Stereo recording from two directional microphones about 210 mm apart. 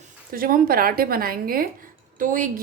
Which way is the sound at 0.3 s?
45° right (ahead or behind).